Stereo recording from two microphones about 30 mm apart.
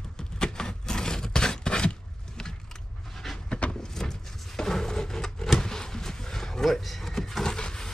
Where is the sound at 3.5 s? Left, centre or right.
Left.